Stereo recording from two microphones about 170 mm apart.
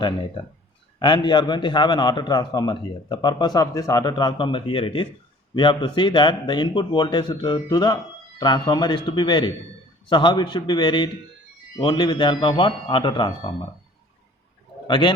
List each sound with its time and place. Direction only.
0.9 s a man's voice: 25° left (ahead or behind)
14.8 s speech: 25° left (ahead or behind)